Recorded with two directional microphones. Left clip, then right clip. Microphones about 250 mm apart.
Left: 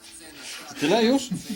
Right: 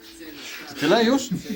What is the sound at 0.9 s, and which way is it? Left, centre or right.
Speech, right.